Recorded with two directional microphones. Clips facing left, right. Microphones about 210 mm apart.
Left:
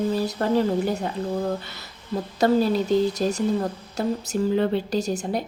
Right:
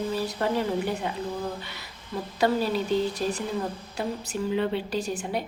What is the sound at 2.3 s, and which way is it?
Speech, 40° left (ahead or behind).